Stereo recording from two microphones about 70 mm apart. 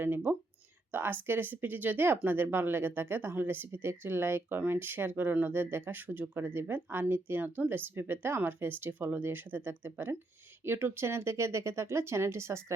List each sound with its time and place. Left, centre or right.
0.0 s speech: right